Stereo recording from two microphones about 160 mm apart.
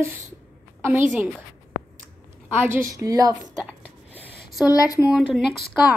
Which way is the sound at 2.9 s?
20° right (ahead or behind).